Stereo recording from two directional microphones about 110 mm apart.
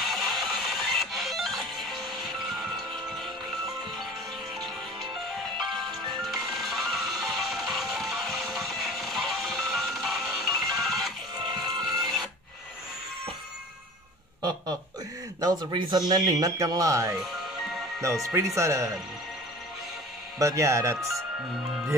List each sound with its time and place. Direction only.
0.1 s music: centre (ahead or behind)
5.7 s music: centre (ahead or behind)
15.4 s speech: 40° right (ahead or behind)
20.3 s speech: 25° right (ahead or behind)